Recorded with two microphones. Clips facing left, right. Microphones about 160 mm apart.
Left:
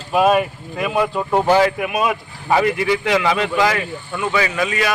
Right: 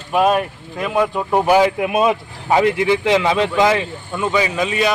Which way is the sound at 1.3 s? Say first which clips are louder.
Right 1 dB; 15° right (ahead or behind).